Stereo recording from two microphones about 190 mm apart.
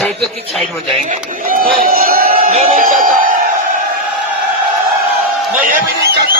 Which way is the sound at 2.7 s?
45° right (ahead or behind).